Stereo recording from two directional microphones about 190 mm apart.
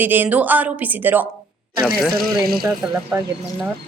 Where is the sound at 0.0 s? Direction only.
10° right (ahead or behind).